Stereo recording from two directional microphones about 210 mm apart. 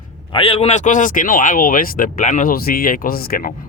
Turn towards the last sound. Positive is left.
turn(degrees=45)  # may be behind; listen again after turning